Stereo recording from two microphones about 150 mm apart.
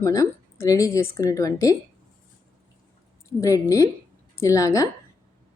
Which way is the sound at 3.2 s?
20° left (ahead or behind).